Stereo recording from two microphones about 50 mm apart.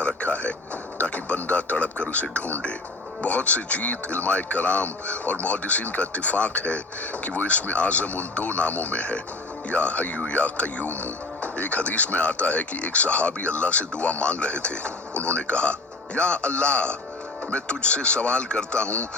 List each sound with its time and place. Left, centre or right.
0.2 s a sound: left
0.9 s music: left
2.2 s speech: left